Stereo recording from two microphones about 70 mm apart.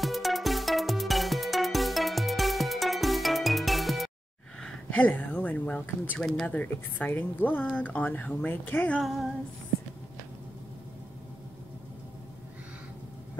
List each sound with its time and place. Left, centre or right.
0.0 s music: centre
4.9 s speech: left
9.0 s female singing: centre